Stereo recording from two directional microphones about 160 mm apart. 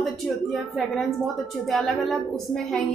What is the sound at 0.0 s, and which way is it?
A woman's voice, centre (ahead or behind).